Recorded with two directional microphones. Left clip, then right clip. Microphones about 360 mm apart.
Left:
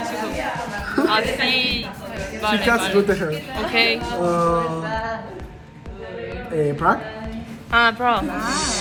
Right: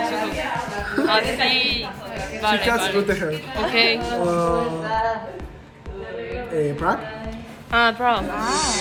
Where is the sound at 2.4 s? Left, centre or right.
Centre.